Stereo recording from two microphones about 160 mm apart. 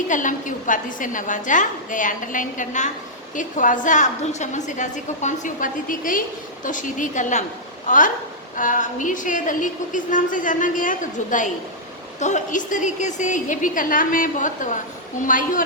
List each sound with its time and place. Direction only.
0.1 s a woman's voice: 55° left (ahead or behind)